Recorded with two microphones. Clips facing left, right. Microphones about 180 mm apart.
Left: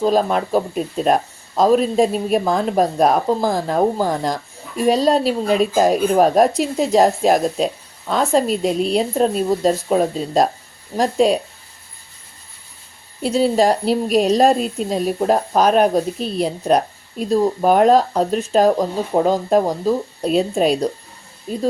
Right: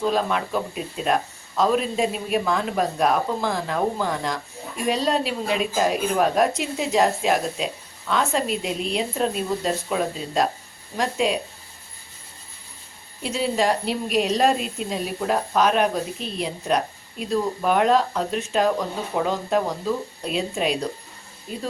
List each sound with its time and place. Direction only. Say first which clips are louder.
0.0 s speech: left 6 dB; 35° left (ahead or behind)
13.2 s speech: left 7 dB; 40° left (ahead or behind)